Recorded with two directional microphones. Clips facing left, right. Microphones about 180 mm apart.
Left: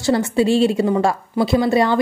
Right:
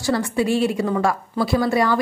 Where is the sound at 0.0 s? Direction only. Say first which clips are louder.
Left 4 dB; 25° left (ahead or behind).